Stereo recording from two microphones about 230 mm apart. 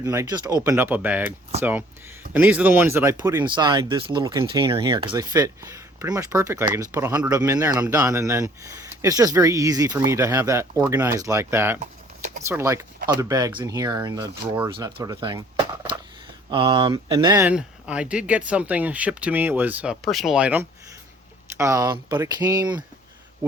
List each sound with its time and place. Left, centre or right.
0.0 s speech: centre
2.3 s speech: centre